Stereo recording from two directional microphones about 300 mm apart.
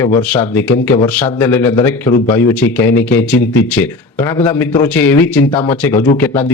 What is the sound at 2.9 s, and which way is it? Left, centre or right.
Speech, left.